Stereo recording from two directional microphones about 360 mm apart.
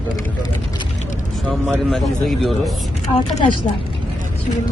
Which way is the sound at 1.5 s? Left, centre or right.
Centre.